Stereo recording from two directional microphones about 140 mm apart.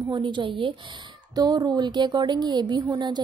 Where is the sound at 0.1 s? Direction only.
35° right (ahead or behind).